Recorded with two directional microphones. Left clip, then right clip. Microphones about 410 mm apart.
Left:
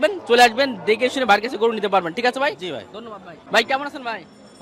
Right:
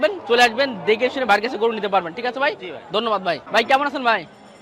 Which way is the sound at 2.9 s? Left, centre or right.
Right.